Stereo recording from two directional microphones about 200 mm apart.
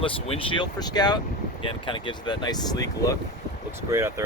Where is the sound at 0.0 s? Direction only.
25° left (ahead or behind).